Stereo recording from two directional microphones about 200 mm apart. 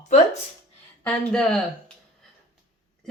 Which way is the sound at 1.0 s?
5° left (ahead or behind).